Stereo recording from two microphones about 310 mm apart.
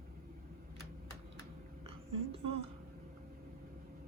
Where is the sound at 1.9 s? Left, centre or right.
Centre.